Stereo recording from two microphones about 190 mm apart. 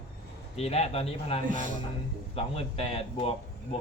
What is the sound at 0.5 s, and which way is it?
Speech, 35° left (ahead or behind).